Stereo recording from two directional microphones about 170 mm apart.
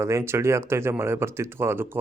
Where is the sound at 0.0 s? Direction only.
15° right (ahead or behind).